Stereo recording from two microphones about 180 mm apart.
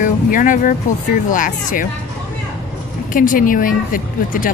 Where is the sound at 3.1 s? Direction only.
50° left (ahead or behind).